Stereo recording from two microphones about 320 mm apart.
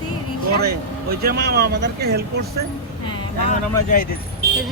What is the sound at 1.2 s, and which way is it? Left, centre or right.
Speech, right.